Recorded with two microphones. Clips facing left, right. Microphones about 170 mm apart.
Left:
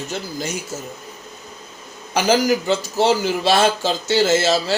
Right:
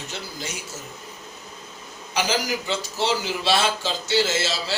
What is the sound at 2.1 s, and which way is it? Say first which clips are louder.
A man's voice: left 8 dB; 50° left (ahead or behind).